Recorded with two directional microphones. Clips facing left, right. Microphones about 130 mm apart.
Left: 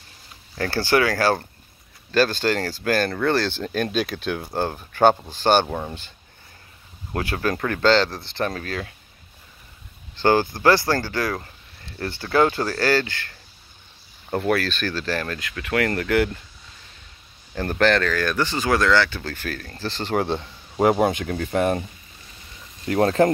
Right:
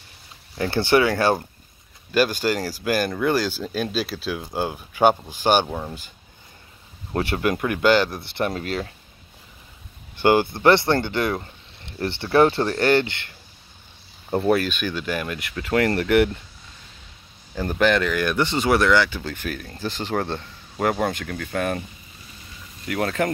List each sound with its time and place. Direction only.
0.6 s speech: 20° right (ahead or behind)
5.7 s speech: centre (ahead or behind)
7.2 s speech: 25° right (ahead or behind)
10.1 s speech: 15° right (ahead or behind)
14.4 s speech: 20° right (ahead or behind)
17.6 s speech: 10° right (ahead or behind)
20.2 s speech: 10° left (ahead or behind)
22.8 s speech: 30° left (ahead or behind)